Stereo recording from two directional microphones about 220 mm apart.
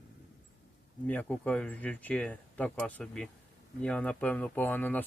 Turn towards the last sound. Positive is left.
turn(degrees=10)  # may be behind; listen again after turning